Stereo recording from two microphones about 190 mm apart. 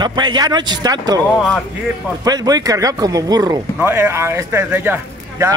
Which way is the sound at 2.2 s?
20° right (ahead or behind).